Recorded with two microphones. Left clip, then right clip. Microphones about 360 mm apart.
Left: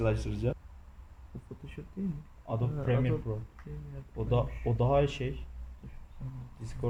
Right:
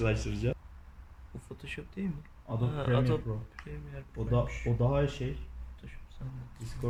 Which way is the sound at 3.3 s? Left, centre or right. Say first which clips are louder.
Left 2 dB; left.